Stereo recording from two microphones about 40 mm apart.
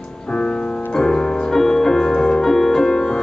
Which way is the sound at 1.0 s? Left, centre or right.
Centre.